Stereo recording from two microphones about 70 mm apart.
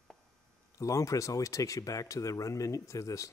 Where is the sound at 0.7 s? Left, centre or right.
Left.